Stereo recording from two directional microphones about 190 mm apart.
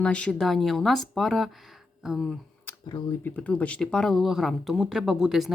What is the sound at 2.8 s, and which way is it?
Speech, 20° left (ahead or behind).